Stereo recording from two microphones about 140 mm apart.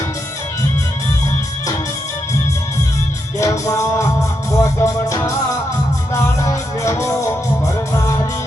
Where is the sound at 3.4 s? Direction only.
20° left (ahead or behind).